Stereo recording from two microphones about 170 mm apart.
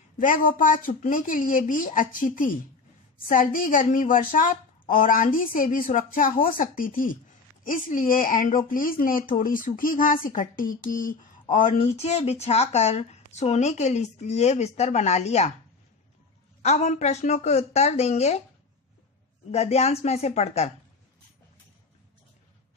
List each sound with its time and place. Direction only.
0.2 s speech: 55° left (ahead or behind)
11.8 s a woman's voice: 40° left (ahead or behind)
16.6 s a woman's voice: 40° left (ahead or behind)
19.5 s a woman's voice: 40° left (ahead or behind)